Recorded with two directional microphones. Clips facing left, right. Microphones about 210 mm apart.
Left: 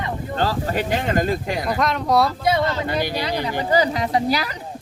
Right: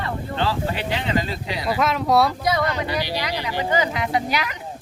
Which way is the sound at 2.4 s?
25° left (ahead or behind).